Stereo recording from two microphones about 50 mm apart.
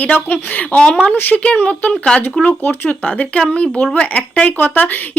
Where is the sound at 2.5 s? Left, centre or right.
Left.